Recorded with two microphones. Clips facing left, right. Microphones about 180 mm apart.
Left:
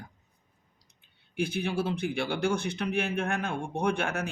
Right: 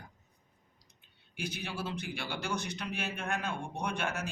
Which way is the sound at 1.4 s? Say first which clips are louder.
Left 9 dB; 55° left (ahead or behind).